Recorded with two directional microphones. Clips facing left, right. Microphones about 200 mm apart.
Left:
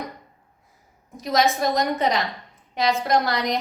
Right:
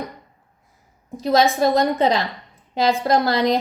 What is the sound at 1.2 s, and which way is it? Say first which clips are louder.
A woman's voice: right 4 dB; 30° right (ahead or behind).